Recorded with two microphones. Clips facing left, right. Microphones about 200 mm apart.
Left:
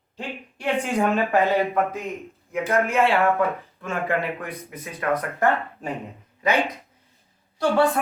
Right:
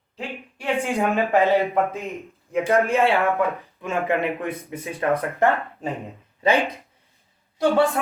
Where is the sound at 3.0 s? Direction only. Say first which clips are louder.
Even; 15° right (ahead or behind).